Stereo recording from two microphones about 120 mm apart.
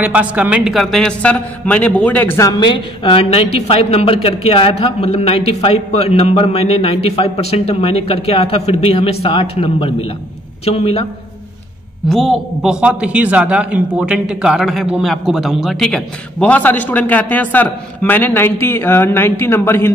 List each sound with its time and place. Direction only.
0.0 s speech: 10° right (ahead or behind)
0.7 s speech: 5° left (ahead or behind); by 2.6 s 25° left (ahead or behind)
2.6 s a woman's voice: 45° left (ahead or behind)
12.1 s a man's voice: centre (ahead or behind)
12.8 s speech: 10° right (ahead or behind); by 19.9 s 20° left (ahead or behind)